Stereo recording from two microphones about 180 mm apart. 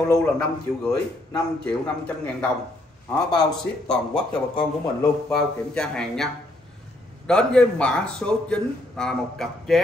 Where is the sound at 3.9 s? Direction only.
5° left (ahead or behind).